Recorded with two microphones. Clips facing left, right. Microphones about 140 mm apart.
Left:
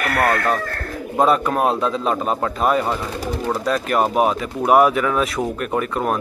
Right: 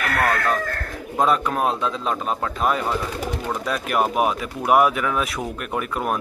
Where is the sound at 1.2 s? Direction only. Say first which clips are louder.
Left 3 dB; 5° left (ahead or behind).